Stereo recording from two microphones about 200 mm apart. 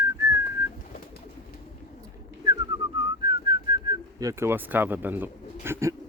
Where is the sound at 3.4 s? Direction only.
25° right (ahead or behind).